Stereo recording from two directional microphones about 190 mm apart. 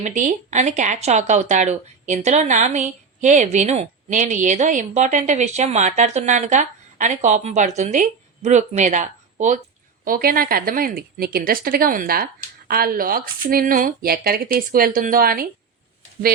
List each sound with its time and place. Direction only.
0.0 s speech: 40° right (ahead or behind)